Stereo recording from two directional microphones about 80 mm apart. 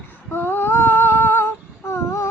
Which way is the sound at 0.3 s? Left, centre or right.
Left.